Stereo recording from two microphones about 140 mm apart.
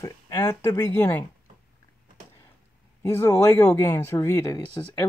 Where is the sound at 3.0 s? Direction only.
15° left (ahead or behind).